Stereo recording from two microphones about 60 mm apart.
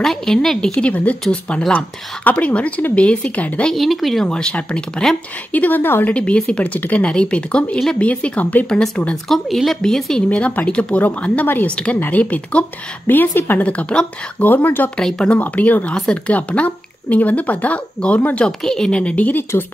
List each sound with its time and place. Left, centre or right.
0.0 s speech: centre
0.7 s a woman's voice: left
2.3 s a woman's voice: left
3.7 s speech: centre
4.3 s speech: centre
5.5 s a woman's voice: left
6.1 s a woman's voice: centre
9.1 s speech: centre
10.3 s a woman's voice: left
13.7 s a woman's voice: left
15.0 s speech: centre
15.3 s a woman's voice: left
18.6 s speech: centre
19.5 s speech: left